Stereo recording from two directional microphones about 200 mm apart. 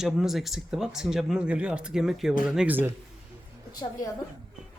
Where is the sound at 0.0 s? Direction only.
Centre (ahead or behind).